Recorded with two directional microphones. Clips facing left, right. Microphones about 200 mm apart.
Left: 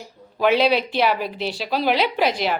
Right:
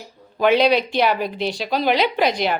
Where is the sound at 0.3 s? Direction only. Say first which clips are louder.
Right 2 dB; 5° left (ahead or behind).